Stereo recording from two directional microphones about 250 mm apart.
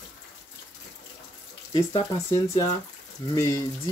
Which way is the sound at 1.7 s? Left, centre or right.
Centre.